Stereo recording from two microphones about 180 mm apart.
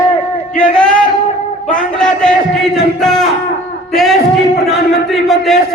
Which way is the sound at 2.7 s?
Centre (ahead or behind).